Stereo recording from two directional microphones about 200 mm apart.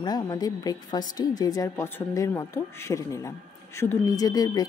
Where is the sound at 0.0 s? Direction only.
20° left (ahead or behind).